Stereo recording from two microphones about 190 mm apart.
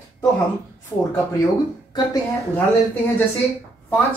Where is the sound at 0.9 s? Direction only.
10° left (ahead or behind).